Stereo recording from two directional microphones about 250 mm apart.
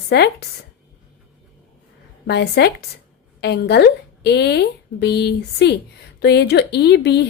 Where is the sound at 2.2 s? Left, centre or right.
Left.